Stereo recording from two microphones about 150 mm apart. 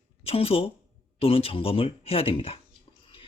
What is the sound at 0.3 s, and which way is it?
Speech, 40° left (ahead or behind).